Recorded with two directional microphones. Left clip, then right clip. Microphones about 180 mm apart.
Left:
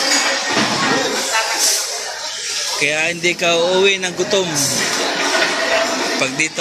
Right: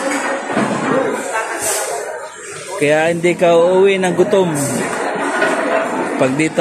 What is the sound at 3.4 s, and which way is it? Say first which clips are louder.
Speech: right 4 dB; 5° right (ahead or behind).